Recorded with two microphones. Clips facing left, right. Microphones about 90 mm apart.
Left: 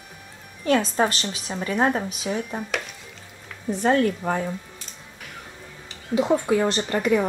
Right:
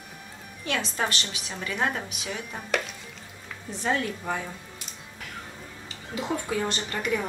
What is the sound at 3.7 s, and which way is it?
Speech, 50° left (ahead or behind).